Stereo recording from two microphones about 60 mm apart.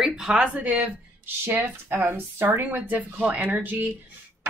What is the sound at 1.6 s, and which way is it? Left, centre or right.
Speech, right.